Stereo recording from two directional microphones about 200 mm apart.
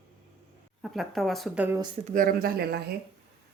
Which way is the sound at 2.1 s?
45° right (ahead or behind).